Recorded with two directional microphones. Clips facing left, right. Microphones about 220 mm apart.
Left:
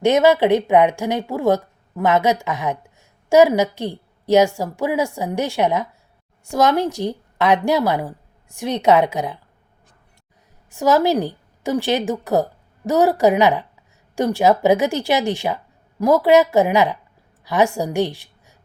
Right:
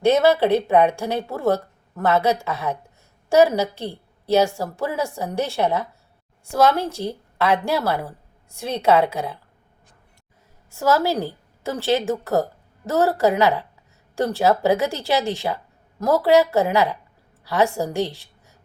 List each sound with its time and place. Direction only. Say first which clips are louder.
0.0 s a woman's voice: left 2 dB; 15° left (ahead or behind)
10.7 s a woman's voice: left 4 dB; 15° left (ahead or behind)